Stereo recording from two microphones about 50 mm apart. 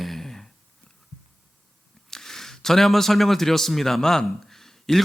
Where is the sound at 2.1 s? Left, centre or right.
Centre.